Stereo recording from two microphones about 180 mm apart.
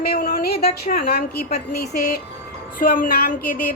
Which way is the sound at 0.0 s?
55° left (ahead or behind).